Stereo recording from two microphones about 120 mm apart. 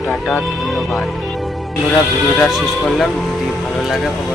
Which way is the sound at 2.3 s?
Centre (ahead or behind).